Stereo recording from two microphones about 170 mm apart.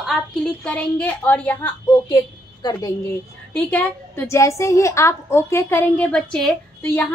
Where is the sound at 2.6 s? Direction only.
25° left (ahead or behind).